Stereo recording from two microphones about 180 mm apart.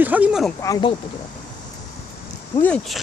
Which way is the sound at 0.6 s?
25° left (ahead or behind).